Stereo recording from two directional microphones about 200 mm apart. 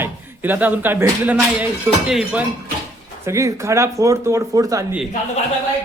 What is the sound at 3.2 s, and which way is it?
Speech, 15° right (ahead or behind).